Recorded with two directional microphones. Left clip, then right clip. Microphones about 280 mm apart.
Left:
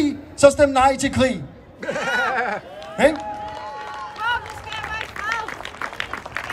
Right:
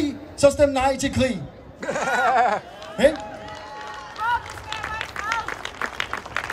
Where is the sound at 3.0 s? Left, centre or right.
Centre.